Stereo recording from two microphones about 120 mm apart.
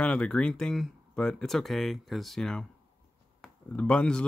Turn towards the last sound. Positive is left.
turn(degrees=10)  # may be behind; listen again after turning